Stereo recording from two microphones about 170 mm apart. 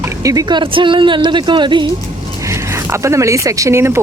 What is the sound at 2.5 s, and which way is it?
Speech, 15° right (ahead or behind).